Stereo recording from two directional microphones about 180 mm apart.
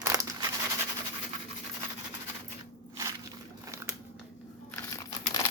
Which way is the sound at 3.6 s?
15° right (ahead or behind).